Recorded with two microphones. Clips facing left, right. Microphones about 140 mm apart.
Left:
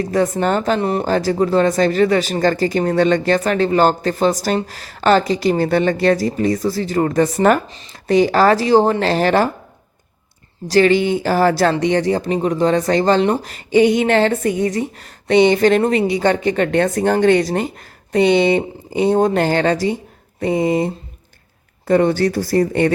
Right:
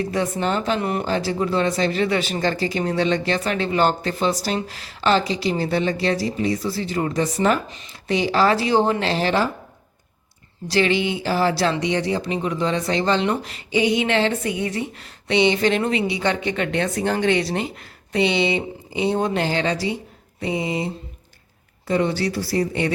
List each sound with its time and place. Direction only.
0.0 s speech: 40° left (ahead or behind)
0.8 s speech: 35° left (ahead or behind); by 7.6 s 55° left (ahead or behind)
7.7 s speech: 40° left (ahead or behind)
10.7 s speech: 45° left (ahead or behind)